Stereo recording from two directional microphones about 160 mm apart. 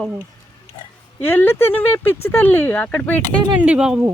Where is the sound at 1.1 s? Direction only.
15° left (ahead or behind).